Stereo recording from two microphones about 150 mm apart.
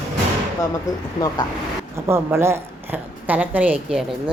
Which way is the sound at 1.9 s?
15° right (ahead or behind).